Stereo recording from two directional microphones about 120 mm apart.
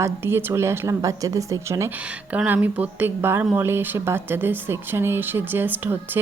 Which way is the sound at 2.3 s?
15° right (ahead or behind).